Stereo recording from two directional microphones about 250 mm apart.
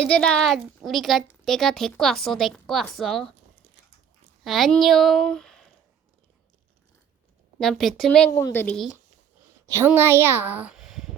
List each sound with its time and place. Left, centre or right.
0.0 s a woman's voice: centre
4.4 s a woman's voice: centre
7.6 s a woman's voice: centre
9.6 s speech: centre